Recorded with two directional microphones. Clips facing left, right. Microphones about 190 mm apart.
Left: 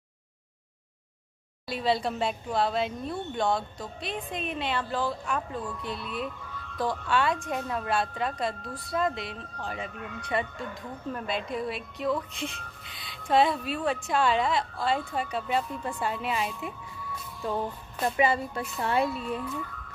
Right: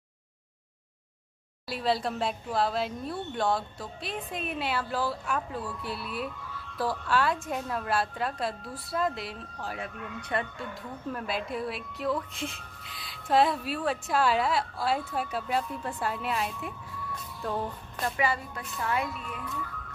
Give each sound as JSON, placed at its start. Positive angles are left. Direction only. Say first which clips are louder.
{"t": 1.7, "sound": "a woman's voice", "louder": "left 1 dB", "side_deg": 0}
{"t": 17.4, "sound": "music", "louder": "left 2 dB", "side_deg": 0}
{"t": 18.0, "sound": "a woman's voice", "louder": "left 4 dB", "side_deg": 25}